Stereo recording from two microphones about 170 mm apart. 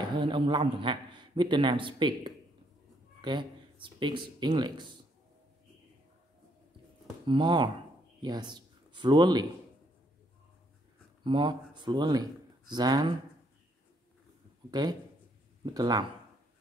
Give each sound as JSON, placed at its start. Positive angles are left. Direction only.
{"t": 0.1, "sound": "a man's voice", "side_deg": -30}
{"t": 7.2, "sound": "a man's voice", "side_deg": -25}
{"t": 11.2, "sound": "speech", "side_deg": -25}
{"t": 14.7, "sound": "a man's voice", "side_deg": -25}